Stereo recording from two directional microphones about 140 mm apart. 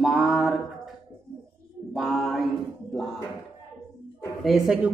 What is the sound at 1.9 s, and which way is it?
Speech, centre (ahead or behind).